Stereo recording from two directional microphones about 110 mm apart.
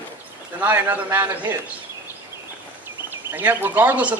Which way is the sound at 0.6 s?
15° right (ahead or behind).